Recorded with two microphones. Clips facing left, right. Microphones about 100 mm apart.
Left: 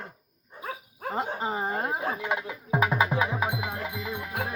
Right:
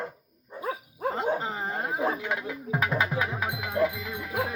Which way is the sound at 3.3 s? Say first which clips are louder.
Left 3 dB; 15° left (ahead or behind).